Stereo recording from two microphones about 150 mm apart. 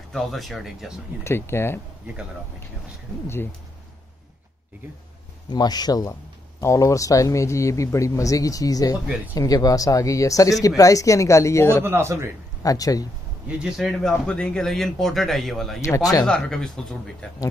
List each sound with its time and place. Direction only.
0.1 s speech: centre (ahead or behind)
1.2 s speech: 15° left (ahead or behind)
5.5 s speech: 25° left (ahead or behind)
11.8 s a man's voice: 15° right (ahead or behind)
12.6 s speech: 25° left (ahead or behind)
13.5 s speech: 5° right (ahead or behind)
15.8 s speech: 20° left (ahead or behind)
16.3 s speech: 5° left (ahead or behind)